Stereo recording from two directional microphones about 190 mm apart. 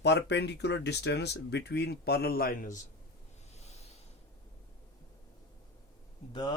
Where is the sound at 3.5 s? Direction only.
35° left (ahead or behind).